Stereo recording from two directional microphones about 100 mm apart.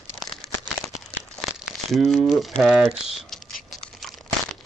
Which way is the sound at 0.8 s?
Centre (ahead or behind).